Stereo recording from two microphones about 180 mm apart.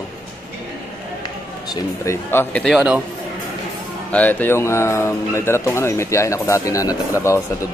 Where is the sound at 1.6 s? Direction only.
20° left (ahead or behind).